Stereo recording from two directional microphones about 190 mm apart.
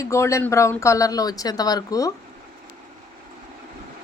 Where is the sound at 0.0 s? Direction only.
15° left (ahead or behind).